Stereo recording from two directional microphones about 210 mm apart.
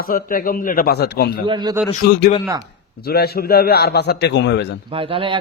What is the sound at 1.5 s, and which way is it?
Speech, 20° right (ahead or behind).